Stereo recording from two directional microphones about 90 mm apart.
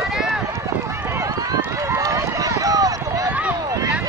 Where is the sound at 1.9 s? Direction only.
40° right (ahead or behind).